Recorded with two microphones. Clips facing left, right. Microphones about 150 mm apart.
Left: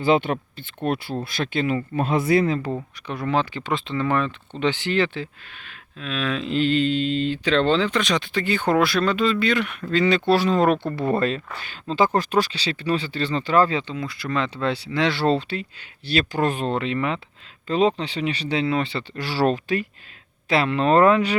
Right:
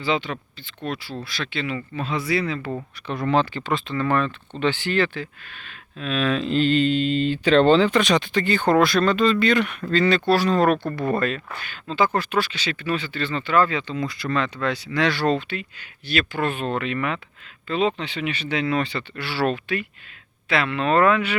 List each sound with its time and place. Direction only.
0.0 s speech: 55° left (ahead or behind)
2.7 s speech: 5° left (ahead or behind)
3.7 s speech: 20° left (ahead or behind)
6.0 s speech: centre (ahead or behind)
9.9 s speech: 15° left (ahead or behind); by 13.8 s 35° left (ahead or behind)
13.9 s speech: 5° left (ahead or behind)
14.3 s speech: 25° left (ahead or behind)
17.7 s speech: 35° left (ahead or behind)